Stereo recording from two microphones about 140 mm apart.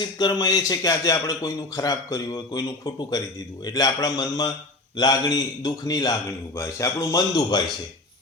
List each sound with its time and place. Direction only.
0.2 s a man's voice: 25° left (ahead or behind)